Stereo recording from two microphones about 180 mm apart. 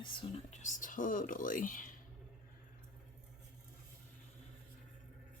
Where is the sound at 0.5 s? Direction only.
45° left (ahead or behind).